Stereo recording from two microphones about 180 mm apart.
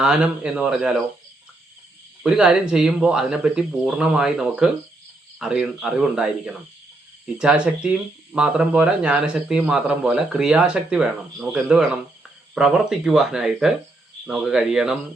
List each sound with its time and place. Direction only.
0.0 s speech: 5° right (ahead or behind)
2.2 s speech: 5° right (ahead or behind)